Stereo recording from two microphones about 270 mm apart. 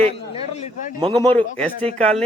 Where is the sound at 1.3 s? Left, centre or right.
Centre.